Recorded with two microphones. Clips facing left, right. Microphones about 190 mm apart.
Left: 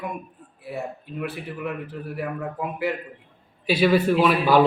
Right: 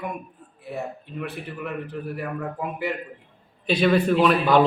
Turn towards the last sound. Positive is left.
turn(degrees=5)  # may be behind; listen again after turning